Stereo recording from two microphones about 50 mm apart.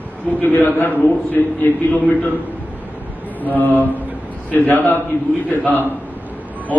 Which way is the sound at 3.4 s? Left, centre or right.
Left.